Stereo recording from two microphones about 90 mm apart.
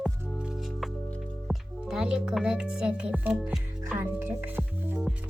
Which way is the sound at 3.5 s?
20° right (ahead or behind).